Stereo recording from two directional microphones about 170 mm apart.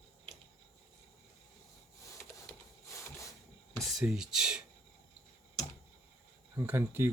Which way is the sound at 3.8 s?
Centre (ahead or behind).